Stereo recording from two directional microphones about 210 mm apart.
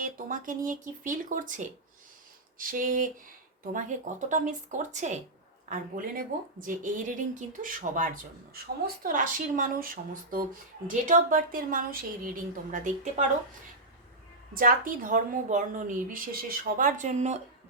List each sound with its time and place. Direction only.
0.0 s a woman's voice: 40° right (ahead or behind)
14.5 s a woman's voice: 40° right (ahead or behind)